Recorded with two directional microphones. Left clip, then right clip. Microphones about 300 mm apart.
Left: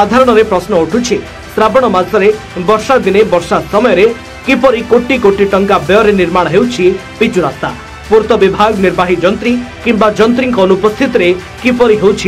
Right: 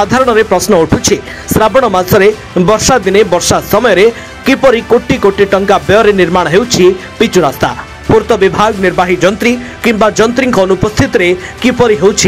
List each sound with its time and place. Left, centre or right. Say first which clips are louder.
0.0 s speech: left 1 dB; right